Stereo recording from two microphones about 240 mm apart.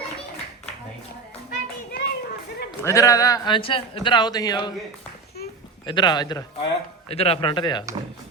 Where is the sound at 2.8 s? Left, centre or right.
Centre.